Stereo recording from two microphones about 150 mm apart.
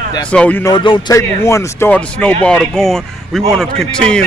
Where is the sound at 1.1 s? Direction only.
20° left (ahead or behind).